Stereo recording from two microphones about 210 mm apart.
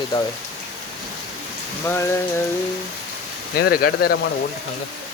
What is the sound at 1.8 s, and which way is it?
Speech, 10° left (ahead or behind).